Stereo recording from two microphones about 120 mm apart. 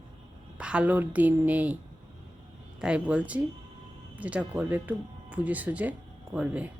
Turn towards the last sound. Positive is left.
turn(degrees=-10)  # may be behind; listen again after turning